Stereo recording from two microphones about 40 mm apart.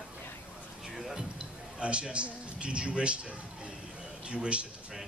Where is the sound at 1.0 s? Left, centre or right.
Centre.